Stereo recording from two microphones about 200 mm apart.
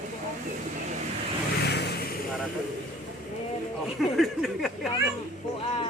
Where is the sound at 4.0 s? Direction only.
Centre (ahead or behind).